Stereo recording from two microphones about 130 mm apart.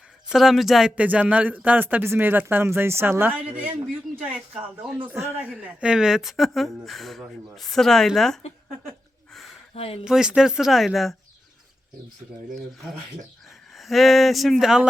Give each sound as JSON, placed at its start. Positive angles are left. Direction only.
{"t": 0.3, "sound": "speech", "side_deg": 0}
{"t": 5.2, "sound": "speech", "side_deg": -20}
{"t": 5.5, "sound": "speech", "side_deg": -5}
{"t": 9.7, "sound": "speech", "side_deg": 50}
{"t": 10.0, "sound": "speech", "side_deg": -5}
{"t": 13.7, "sound": "speech", "side_deg": 0}